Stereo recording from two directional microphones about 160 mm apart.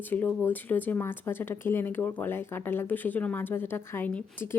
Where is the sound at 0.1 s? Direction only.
10° left (ahead or behind).